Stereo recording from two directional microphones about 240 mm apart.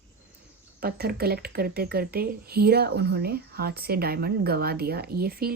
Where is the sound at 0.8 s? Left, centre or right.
Right.